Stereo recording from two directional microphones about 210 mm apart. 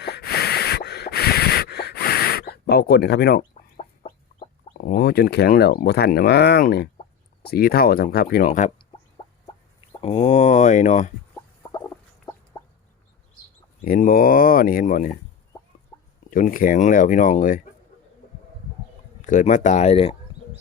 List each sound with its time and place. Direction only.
0.0 s a sound: 50° left (ahead or behind)
3.5 s chicken: 30° left (ahead or behind)
4.8 s speech: 45° left (ahead or behind)
8.9 s a sound: 20° left (ahead or behind)
11.3 s a sound: 20° left (ahead or behind)
12.5 s chicken: 20° left (ahead or behind)
13.8 s speech: 40° left (ahead or behind)
15.9 s chicken: 20° left (ahead or behind)
16.3 s speech: 40° left (ahead or behind)
19.2 s speech: 35° left (ahead or behind)